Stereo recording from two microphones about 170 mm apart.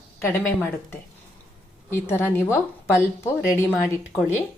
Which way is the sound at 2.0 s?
15° left (ahead or behind).